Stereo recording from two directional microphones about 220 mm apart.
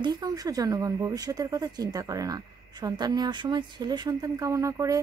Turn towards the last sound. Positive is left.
turn(degrees=-15)  # may be behind; listen again after turning